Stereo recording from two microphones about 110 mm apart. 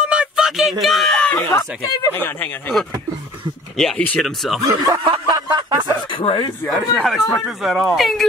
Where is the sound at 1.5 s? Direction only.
25° left (ahead or behind).